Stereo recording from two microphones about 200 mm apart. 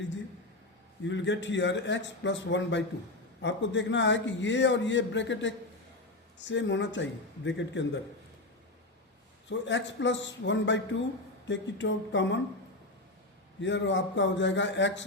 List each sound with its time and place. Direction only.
1.0 s a man's voice: 65° left (ahead or behind)
9.5 s a man's voice: 65° left (ahead or behind)
13.6 s a man's voice: 65° left (ahead or behind)